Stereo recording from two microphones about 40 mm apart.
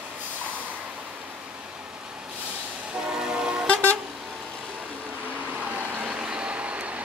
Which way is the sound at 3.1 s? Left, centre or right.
Centre.